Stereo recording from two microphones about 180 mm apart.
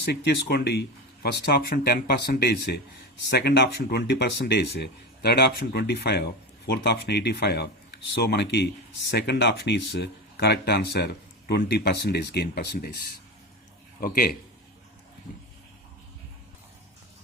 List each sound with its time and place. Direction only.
0.1 s speech: 65° left (ahead or behind)
14.0 s a man's voice: 55° left (ahead or behind)